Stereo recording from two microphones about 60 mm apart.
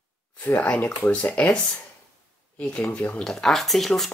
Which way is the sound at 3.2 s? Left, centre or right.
Centre.